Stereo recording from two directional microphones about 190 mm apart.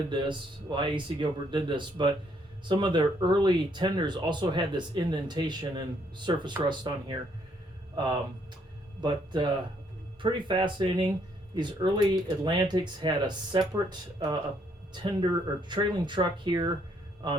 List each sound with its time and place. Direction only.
0.1 s speech: 25° right (ahead or behind)
14.9 s speech: 25° right (ahead or behind)